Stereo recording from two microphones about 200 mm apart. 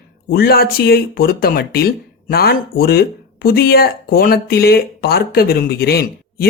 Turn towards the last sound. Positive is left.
turn(degrees=50)  # may be behind; listen again after turning